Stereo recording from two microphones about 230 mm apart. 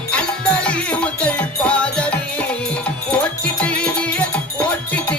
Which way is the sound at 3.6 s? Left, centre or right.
Centre.